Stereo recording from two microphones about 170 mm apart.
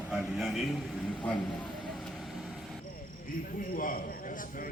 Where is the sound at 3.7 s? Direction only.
55° left (ahead or behind).